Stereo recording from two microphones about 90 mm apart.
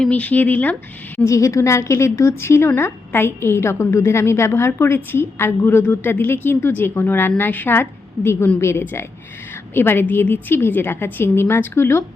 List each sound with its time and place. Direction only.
0.0 s speech: 15° left (ahead or behind)
1.2 s a woman's voice: 35° left (ahead or behind)